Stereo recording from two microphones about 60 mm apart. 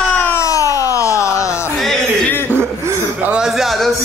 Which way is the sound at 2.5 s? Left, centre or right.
Right.